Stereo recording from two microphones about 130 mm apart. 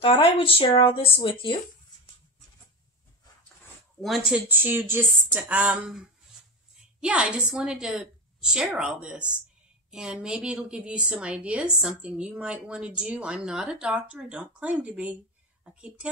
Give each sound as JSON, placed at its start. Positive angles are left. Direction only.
{"t": 0.0, "sound": "speech", "side_deg": 40}
{"t": 4.0, "sound": "speech", "side_deg": 0}
{"t": 4.5, "sound": "a woman's voice", "side_deg": -15}